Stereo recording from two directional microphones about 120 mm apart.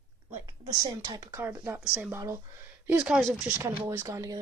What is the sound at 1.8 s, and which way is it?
Speech, 10° right (ahead or behind).